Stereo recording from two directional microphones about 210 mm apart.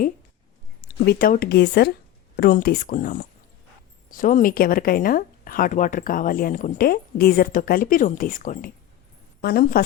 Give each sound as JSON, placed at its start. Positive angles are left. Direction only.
{"t": 1.0, "sound": "a woman's voice", "side_deg": 45}